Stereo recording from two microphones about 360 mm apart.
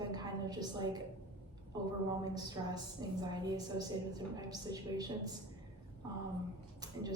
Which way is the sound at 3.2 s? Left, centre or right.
Centre.